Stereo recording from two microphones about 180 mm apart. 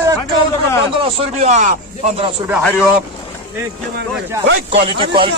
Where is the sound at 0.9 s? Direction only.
35° right (ahead or behind).